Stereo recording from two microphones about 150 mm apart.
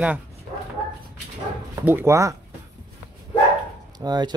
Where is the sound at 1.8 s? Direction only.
15° right (ahead or behind).